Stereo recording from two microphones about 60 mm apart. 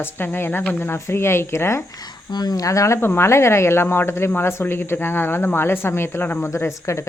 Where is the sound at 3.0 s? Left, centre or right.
Left.